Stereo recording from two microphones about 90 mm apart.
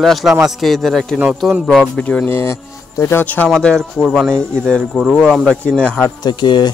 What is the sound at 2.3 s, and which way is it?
Speech, 30° left (ahead or behind).